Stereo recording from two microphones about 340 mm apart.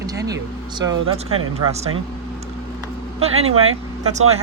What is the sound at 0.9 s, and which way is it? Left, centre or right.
Speech, right.